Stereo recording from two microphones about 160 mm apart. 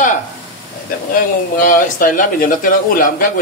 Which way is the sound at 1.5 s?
60° left (ahead or behind).